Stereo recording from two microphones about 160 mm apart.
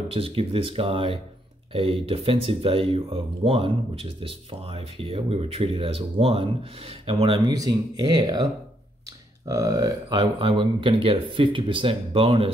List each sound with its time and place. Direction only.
0.1 s speech: 35° right (ahead or behind)
9.5 s speech: 20° right (ahead or behind)